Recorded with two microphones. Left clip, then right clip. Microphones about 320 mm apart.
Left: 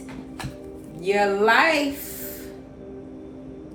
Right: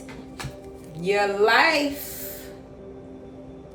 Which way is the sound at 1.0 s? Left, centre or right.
Centre.